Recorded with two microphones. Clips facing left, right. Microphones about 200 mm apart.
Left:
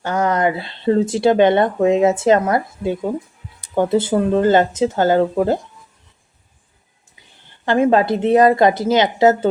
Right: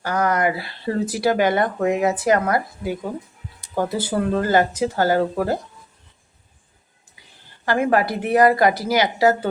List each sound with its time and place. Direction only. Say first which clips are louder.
0.0 s speech: left 3 dB; 25° left (ahead or behind)
7.6 s speech: left 4 dB; 20° left (ahead or behind)